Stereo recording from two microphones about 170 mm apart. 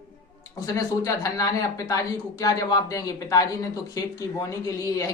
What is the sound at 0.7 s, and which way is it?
Speech, 20° left (ahead or behind).